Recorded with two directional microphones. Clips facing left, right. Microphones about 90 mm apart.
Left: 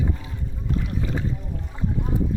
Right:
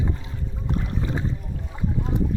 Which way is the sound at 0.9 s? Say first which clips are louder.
Even; 25° right (ahead or behind).